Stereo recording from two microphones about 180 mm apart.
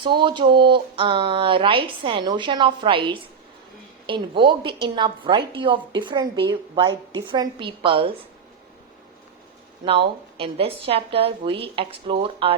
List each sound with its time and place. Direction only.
0.0 s a woman's voice: 25° right (ahead or behind)
10.3 s speech: 30° right (ahead or behind)